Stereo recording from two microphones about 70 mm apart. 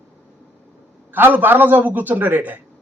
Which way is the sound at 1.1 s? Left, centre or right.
Right.